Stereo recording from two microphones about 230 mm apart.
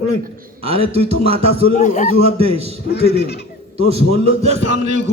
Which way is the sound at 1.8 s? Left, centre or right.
Left.